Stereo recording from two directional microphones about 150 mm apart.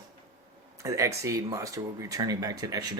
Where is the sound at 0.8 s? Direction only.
20° right (ahead or behind).